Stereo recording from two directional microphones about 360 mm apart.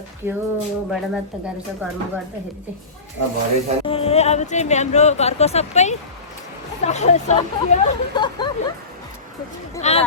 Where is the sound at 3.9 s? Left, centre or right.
Centre.